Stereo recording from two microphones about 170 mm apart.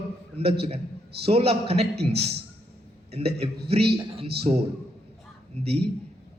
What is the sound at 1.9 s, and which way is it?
Speech, 70° right (ahead or behind).